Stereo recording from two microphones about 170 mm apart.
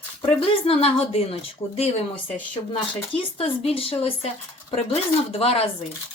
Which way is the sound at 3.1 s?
35° left (ahead or behind).